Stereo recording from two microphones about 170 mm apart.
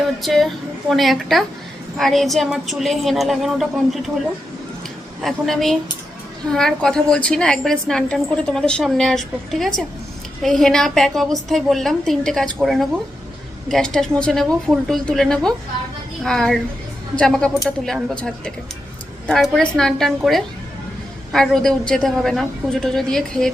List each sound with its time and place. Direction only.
0.2 s a woman's voice: centre (ahead or behind)
5.2 s a woman's voice: centre (ahead or behind)